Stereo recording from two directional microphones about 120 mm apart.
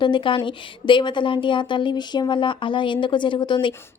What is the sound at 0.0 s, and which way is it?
A woman's voice, 40° left (ahead or behind).